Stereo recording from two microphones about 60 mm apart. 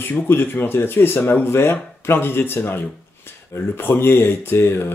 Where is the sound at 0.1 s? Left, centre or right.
Left.